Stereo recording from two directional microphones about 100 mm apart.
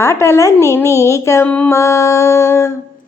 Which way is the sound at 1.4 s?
15° left (ahead or behind).